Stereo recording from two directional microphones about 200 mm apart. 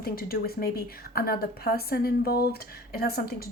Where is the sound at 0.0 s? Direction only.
50° left (ahead or behind).